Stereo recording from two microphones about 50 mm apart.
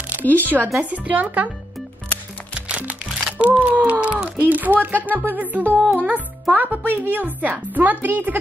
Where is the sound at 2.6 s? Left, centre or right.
Right.